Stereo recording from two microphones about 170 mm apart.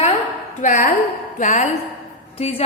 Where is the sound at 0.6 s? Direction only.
50° left (ahead or behind).